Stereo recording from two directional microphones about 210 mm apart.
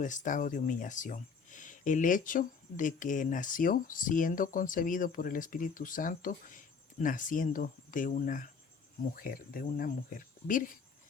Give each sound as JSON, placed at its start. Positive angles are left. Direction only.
{"t": 0.0, "sound": "speech", "side_deg": 35}